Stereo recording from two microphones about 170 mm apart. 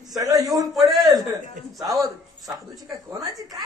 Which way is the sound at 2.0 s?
20° right (ahead or behind).